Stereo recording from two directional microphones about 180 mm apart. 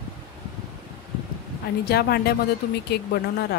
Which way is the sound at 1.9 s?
65° left (ahead or behind).